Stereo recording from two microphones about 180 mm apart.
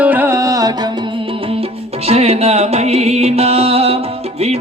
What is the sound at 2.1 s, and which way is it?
Music, 35° right (ahead or behind).